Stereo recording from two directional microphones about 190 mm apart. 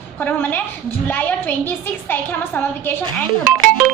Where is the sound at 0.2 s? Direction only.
10° left (ahead or behind).